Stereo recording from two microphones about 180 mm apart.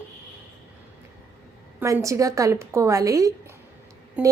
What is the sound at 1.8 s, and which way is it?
A woman's voice, 15° right (ahead or behind).